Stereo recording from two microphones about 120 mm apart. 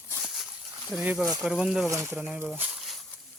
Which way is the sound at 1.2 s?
5° right (ahead or behind).